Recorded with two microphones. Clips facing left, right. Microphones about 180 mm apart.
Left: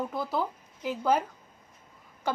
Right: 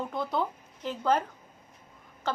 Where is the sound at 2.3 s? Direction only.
10° left (ahead or behind).